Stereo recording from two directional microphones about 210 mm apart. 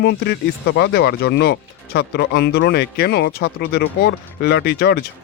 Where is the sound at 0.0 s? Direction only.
50° left (ahead or behind).